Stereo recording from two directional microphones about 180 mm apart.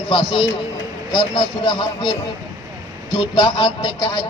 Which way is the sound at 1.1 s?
25° left (ahead or behind).